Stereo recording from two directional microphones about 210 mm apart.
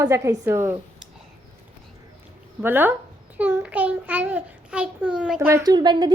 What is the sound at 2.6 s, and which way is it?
A child's voice, 10° right (ahead or behind).